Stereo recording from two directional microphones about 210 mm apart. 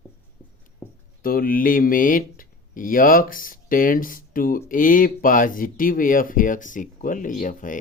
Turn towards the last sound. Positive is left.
turn(degrees=40)  # may be behind; listen again after turning